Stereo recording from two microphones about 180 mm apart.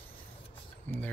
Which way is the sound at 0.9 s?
10° left (ahead or behind).